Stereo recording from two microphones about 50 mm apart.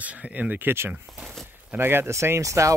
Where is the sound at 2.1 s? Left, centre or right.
Right.